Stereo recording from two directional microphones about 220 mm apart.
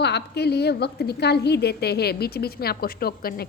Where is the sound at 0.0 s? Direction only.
50° left (ahead or behind).